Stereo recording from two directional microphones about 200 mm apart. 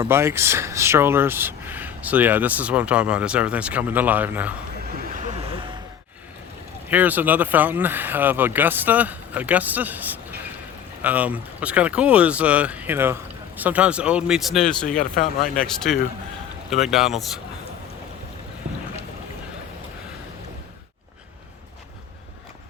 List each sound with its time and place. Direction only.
0.0 s speech: 15° right (ahead or behind)
5.1 s vehicle: 30° right (ahead or behind)
6.8 s speech: 10° right (ahead or behind)
14.8 s speech: 40° left (ahead or behind)
15.5 s speech: 5° left (ahead or behind)